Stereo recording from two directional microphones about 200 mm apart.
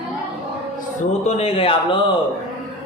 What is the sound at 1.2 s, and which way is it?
Speech, 30° left (ahead or behind).